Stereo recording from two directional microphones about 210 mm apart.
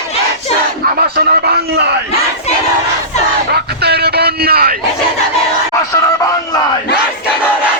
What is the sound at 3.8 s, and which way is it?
Speech, 50° right (ahead or behind).